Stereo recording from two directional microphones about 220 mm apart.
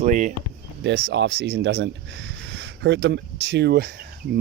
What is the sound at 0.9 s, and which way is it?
Speech, 50° right (ahead or behind).